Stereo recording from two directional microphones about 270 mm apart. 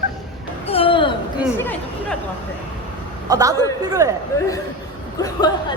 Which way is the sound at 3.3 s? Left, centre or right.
Centre.